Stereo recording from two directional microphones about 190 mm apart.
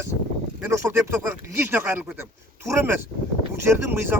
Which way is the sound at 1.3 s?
10° right (ahead or behind).